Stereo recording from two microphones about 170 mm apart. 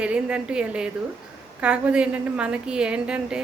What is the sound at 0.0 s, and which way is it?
A woman's voice, 5° right (ahead or behind).